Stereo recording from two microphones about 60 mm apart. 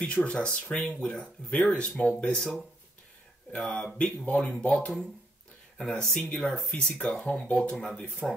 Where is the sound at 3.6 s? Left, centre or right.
Centre.